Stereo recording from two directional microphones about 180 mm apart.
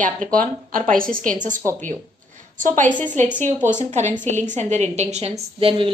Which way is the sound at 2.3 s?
45° right (ahead or behind).